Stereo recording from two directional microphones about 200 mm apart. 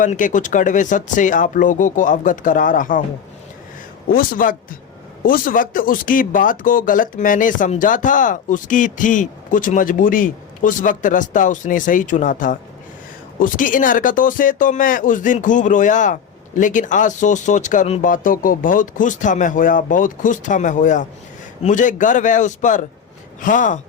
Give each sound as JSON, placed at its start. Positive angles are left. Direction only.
{"t": 0.0, "sound": "speech", "side_deg": 40}
{"t": 4.4, "sound": "speech", "side_deg": 45}